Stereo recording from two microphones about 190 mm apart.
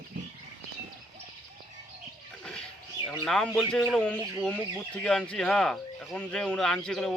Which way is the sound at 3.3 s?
Centre (ahead or behind).